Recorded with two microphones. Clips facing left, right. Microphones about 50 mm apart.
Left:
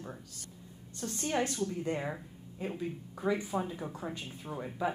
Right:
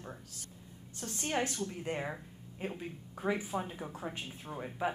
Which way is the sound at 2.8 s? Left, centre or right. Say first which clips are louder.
Left 4 dB; right.